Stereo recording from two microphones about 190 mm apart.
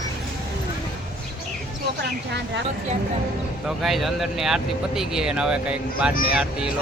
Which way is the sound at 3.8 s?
Centre (ahead or behind).